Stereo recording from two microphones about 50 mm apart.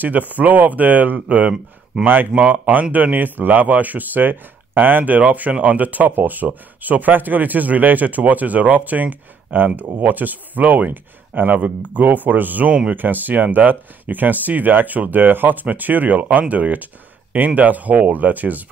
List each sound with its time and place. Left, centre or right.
0.0 s a man's voice: right
2.0 s speech: centre
2.3 s a man's voice: right